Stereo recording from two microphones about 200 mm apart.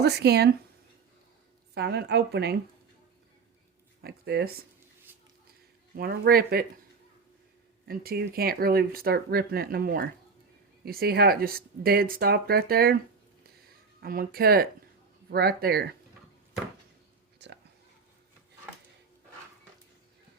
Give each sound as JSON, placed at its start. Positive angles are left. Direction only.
{"t": 0.0, "sound": "speech", "side_deg": -55}
{"t": 1.7, "sound": "a woman's voice", "side_deg": -55}
{"t": 4.0, "sound": "speech", "side_deg": -50}
{"t": 5.1, "sound": "a sound", "side_deg": -10}
{"t": 6.0, "sound": "speech", "side_deg": -50}
{"t": 7.9, "sound": "speech", "side_deg": -50}
{"t": 14.0, "sound": "speech", "side_deg": -50}
{"t": 17.4, "sound": "a sound", "side_deg": -60}